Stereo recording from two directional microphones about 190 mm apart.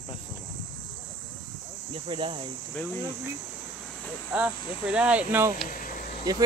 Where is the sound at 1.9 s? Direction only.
25° right (ahead or behind).